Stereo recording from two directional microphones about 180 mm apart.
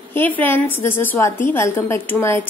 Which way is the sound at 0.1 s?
10° left (ahead or behind).